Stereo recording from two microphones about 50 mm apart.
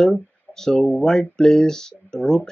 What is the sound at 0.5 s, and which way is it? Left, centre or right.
Speech, centre.